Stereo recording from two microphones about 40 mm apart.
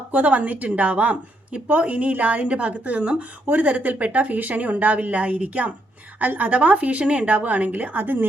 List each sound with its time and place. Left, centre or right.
0.1 s speech: right